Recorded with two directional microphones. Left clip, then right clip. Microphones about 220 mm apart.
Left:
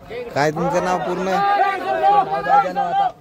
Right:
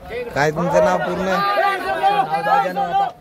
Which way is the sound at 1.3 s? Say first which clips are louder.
Left 1 dB; 45° right (ahead or behind).